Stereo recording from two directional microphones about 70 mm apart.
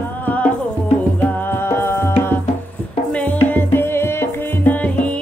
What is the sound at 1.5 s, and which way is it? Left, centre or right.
Music, left.